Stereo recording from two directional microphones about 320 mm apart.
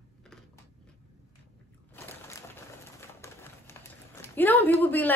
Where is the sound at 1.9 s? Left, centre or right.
Centre.